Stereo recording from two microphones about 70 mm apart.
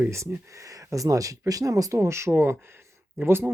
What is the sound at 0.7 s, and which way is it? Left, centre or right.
Speech, right.